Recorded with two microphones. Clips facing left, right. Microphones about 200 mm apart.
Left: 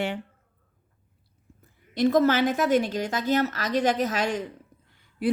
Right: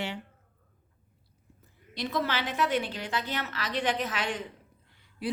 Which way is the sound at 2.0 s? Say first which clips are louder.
Left 11 dB; 45° left (ahead or behind).